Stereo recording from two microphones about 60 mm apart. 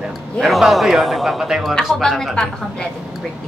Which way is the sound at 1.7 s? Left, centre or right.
Centre.